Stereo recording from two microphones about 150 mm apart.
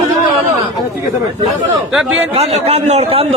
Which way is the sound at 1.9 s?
5° right (ahead or behind).